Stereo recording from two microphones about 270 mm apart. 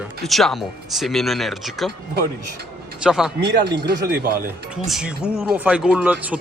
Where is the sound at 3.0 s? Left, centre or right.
Centre.